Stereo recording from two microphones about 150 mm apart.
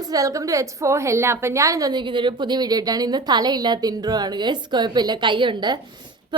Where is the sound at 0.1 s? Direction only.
20° right (ahead or behind).